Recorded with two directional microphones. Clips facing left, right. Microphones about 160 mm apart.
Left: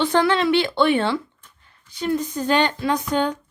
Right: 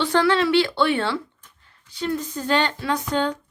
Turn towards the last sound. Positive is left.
turn(degrees=15)  # may be behind; listen again after turning